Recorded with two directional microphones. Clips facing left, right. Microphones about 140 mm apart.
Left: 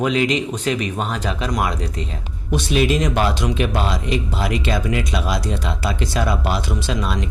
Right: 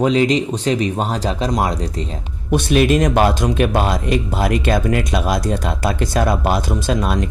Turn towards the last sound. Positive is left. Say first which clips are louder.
# right 4 dB
turn(degrees=-50)  # may be behind; listen again after turning